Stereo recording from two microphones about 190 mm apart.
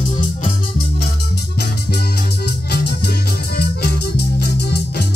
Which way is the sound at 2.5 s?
60° left (ahead or behind).